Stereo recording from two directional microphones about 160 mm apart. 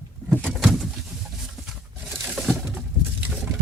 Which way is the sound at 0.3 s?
Centre (ahead or behind).